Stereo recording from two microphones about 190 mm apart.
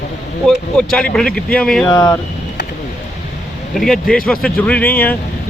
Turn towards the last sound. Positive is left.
turn(degrees=10)  # may be behind; listen again after turning